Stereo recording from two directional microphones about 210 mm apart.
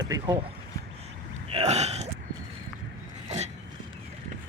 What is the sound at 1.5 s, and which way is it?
Burping, 30° right (ahead or behind).